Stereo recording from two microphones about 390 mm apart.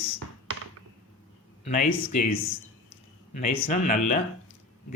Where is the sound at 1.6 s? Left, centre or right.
Centre.